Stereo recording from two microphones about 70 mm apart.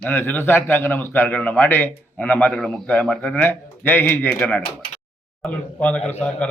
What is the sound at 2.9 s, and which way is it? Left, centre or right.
A man's voice, centre.